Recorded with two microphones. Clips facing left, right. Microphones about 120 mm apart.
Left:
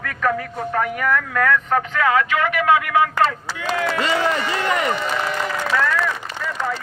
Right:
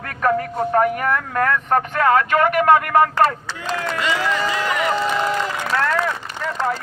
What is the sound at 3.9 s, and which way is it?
Speech, 35° left (ahead or behind).